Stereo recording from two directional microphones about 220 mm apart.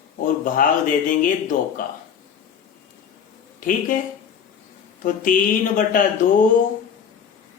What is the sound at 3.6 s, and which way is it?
Speech, 40° left (ahead or behind).